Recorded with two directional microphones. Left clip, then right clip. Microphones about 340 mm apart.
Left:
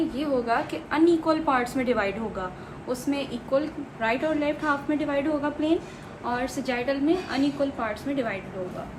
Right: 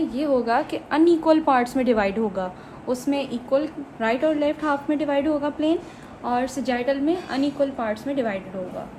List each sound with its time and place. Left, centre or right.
0.2 s a woman's voice: right